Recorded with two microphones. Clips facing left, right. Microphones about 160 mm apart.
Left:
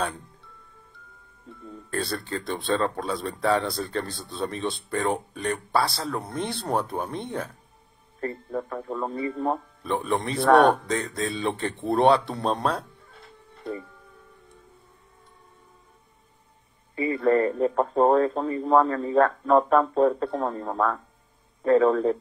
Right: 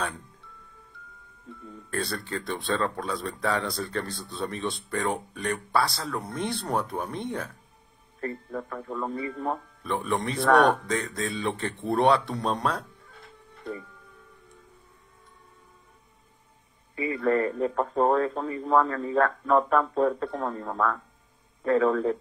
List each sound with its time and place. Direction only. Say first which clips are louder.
1.9 s speech: left 2 dB; 30° left (ahead or behind)
16.9 s speech: left 3 dB; 30° left (ahead or behind)